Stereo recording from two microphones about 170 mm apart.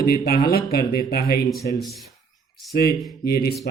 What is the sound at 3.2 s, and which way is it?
Speech, 65° left (ahead or behind).